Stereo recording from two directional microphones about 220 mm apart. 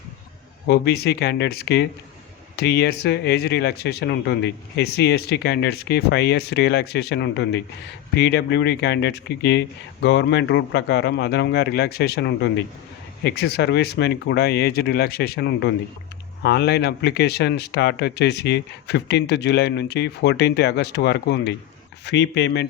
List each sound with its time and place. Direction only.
0.7 s speech: 45° left (ahead or behind)